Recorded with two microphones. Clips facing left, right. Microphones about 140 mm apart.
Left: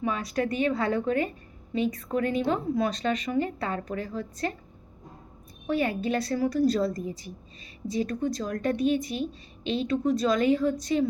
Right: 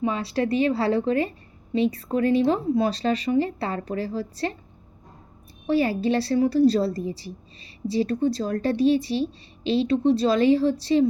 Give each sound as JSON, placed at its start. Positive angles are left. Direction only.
{"t": 0.0, "sound": "a woman's voice", "side_deg": -30}
{"t": 5.6, "sound": "a woman's voice", "side_deg": -30}